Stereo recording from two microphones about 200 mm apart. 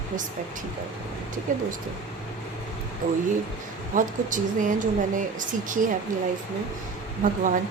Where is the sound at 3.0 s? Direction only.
40° right (ahead or behind).